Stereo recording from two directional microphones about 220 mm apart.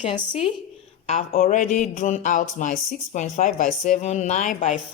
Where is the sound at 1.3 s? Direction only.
40° left (ahead or behind).